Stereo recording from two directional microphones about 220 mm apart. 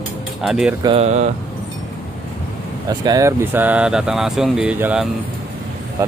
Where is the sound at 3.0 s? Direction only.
15° right (ahead or behind).